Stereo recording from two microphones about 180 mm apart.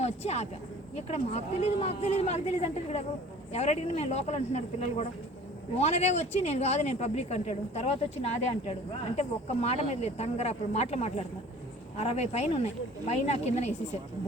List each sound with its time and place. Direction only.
0.0 s speech: 35° left (ahead or behind)